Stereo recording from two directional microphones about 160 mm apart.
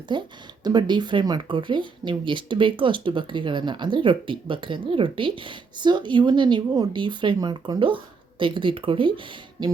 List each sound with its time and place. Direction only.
0.1 s speech: 30° right (ahead or behind)